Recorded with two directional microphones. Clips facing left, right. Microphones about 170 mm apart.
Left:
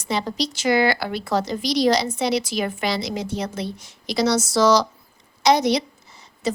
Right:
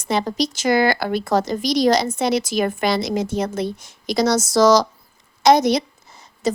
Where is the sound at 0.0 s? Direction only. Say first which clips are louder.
Right 4 dB; 45° right (ahead or behind).